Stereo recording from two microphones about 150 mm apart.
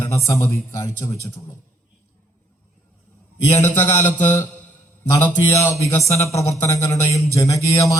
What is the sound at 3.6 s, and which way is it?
Music, 15° left (ahead or behind).